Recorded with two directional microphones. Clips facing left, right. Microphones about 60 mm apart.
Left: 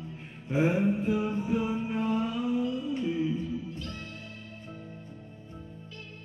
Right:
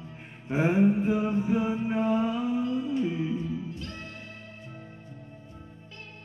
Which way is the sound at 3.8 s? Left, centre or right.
Right.